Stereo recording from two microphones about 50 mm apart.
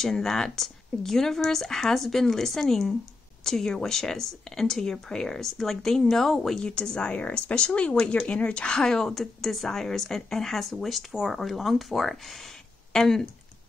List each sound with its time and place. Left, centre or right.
0.0 s speech: centre
6.6 s speech: centre